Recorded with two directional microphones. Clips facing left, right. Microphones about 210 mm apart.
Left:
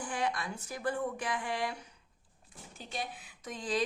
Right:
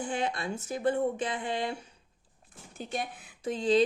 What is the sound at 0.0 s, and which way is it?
Speech, 25° right (ahead or behind).